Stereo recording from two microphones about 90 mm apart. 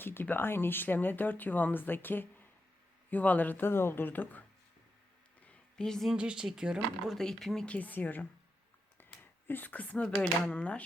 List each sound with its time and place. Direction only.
0.0 s speech: 25° left (ahead or behind)
5.5 s a sound: 5° left (ahead or behind)
6.1 s speech: 10° right (ahead or behind)
7.2 s speech: 5° left (ahead or behind); by 8.3 s 20° left (ahead or behind)
9.0 s a sound: 20° left (ahead or behind)
9.5 s speech: 20° left (ahead or behind)